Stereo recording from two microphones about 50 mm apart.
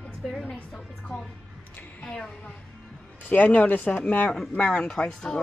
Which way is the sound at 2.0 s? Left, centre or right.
Centre.